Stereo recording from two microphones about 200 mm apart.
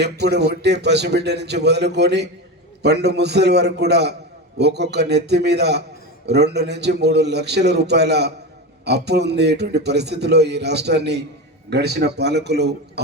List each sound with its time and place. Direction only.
0.0 s a man's voice: 55° right (ahead or behind)